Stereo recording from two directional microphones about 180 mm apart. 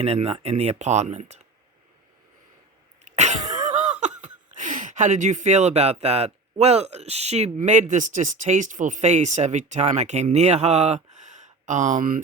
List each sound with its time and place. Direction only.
0.0 s speech: 35° right (ahead or behind)
3.0 s laughter: 40° right (ahead or behind)